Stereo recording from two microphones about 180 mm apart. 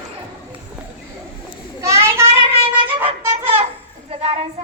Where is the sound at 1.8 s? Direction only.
15° right (ahead or behind).